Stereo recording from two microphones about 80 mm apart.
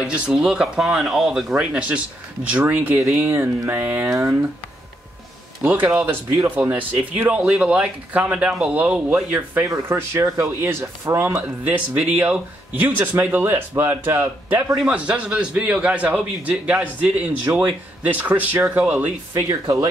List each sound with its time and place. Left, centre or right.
0.0 s speech: centre; by 4.5 s right
5.6 s speech: right
11.4 s speech: right
14.9 s speech: centre